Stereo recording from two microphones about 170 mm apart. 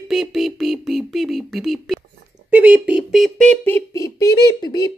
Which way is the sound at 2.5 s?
10° right (ahead or behind).